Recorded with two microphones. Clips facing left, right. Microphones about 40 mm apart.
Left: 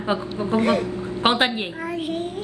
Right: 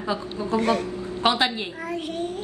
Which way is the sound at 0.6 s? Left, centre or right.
Centre.